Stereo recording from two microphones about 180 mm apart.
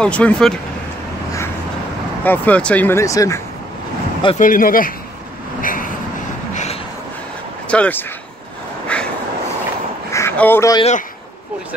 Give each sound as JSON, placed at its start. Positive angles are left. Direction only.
{"t": 0.0, "sound": "speech", "side_deg": 5}
{"t": 2.2, "sound": "speech", "side_deg": 10}
{"t": 4.4, "sound": "speech", "side_deg": 50}
{"t": 5.6, "sound": "vehicle", "side_deg": 50}
{"t": 6.5, "sound": "vehicle", "side_deg": 40}
{"t": 7.6, "sound": "speech", "side_deg": 5}
{"t": 8.8, "sound": "vehicle", "side_deg": 5}
{"t": 10.1, "sound": "a sound", "side_deg": 10}
{"t": 10.8, "sound": "speech", "side_deg": 40}